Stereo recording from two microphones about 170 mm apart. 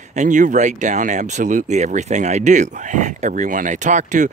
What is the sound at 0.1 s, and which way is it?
Speech, 45° right (ahead or behind).